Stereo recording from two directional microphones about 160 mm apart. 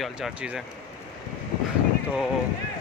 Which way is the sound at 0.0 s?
5° right (ahead or behind).